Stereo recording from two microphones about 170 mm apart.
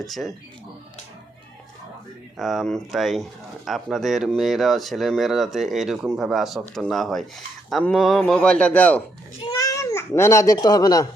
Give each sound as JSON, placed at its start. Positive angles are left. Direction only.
{"t": 0.0, "sound": "speech", "side_deg": 0}
{"t": 2.4, "sound": "speech", "side_deg": 0}
{"t": 9.4, "sound": "speech", "side_deg": 25}